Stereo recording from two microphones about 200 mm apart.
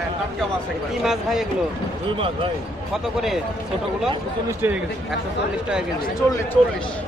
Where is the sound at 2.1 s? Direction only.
25° right (ahead or behind).